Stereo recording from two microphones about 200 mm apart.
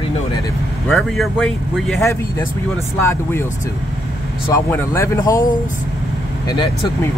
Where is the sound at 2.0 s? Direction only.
15° left (ahead or behind).